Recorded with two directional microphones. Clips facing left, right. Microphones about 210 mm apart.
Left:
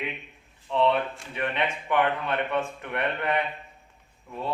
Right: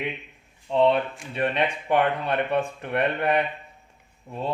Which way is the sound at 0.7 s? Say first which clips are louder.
Right 3 dB; 25° right (ahead or behind).